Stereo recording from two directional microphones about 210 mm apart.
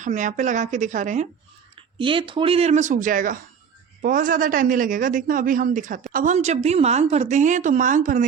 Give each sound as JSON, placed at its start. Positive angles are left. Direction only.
{"t": 0.0, "sound": "a man's voice", "side_deg": -35}
{"t": 1.7, "sound": "a man's voice", "side_deg": -25}